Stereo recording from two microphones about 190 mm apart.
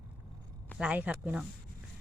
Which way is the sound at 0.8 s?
5° right (ahead or behind).